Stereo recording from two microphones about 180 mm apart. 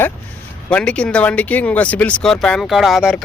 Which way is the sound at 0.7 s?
5° left (ahead or behind).